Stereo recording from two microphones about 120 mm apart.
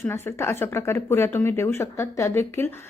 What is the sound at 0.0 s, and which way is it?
Speech, 20° left (ahead or behind).